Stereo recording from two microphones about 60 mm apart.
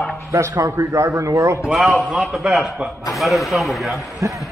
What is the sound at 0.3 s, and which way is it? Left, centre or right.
A man's voice, right.